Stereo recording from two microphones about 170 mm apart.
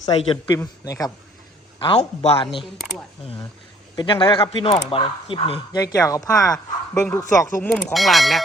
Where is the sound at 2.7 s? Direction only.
Centre (ahead or behind).